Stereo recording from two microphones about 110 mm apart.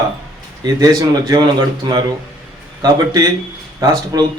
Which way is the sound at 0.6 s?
35° right (ahead or behind).